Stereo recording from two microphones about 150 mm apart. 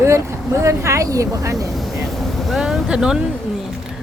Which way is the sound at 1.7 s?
Centre (ahead or behind).